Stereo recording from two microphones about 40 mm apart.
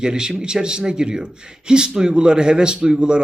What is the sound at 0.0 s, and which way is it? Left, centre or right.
Speech, centre.